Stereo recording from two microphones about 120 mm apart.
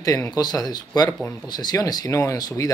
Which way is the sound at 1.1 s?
20° left (ahead or behind).